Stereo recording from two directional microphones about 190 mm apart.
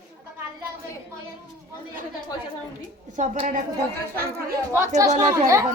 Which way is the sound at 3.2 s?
40° right (ahead or behind).